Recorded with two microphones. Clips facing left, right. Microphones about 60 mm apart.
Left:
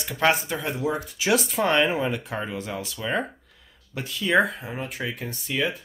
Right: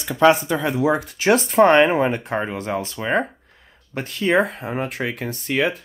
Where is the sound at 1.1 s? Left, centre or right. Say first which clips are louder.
Right 6 dB; right.